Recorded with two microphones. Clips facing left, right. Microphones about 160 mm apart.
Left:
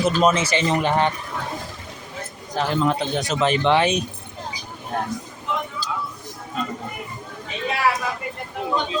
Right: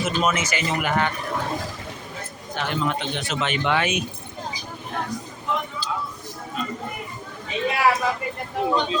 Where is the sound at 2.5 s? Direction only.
35° left (ahead or behind).